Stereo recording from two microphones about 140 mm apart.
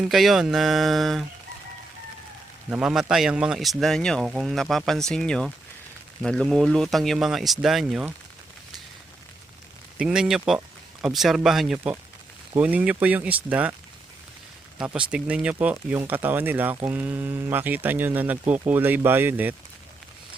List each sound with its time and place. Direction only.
0.0 s speech: centre (ahead or behind)
2.6 s speech: 5° right (ahead or behind)
10.0 s speech: 5° right (ahead or behind)
14.8 s speech: 10° right (ahead or behind)